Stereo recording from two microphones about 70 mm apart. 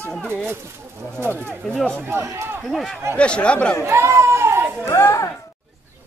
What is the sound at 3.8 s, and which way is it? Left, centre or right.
Speech, right.